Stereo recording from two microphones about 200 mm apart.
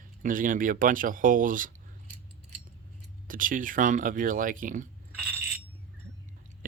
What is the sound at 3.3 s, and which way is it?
Speech, 40° right (ahead or behind).